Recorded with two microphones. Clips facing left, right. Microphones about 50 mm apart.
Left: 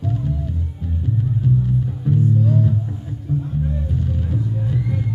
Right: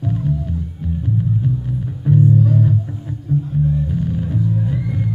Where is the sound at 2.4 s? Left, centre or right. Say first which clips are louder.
Right 2 dB; centre.